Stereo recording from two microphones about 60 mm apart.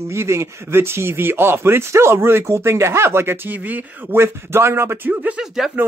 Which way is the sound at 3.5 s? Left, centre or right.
Right.